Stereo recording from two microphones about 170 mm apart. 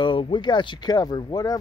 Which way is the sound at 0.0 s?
30° left (ahead or behind).